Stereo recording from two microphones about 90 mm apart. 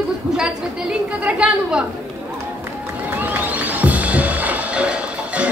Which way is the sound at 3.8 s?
15° right (ahead or behind).